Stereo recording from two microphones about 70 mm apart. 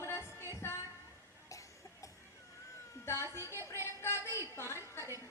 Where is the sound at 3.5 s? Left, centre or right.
Left.